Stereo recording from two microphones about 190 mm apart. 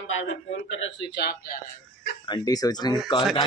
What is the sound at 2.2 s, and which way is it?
Speech, 20° left (ahead or behind).